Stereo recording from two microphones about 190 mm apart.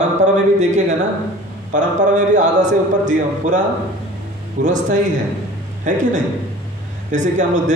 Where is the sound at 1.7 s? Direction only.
40° right (ahead or behind).